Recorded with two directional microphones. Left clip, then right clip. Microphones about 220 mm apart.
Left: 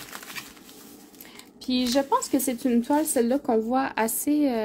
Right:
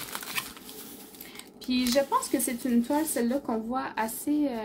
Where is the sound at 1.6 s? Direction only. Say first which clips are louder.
Left 1 dB; 40° left (ahead or behind).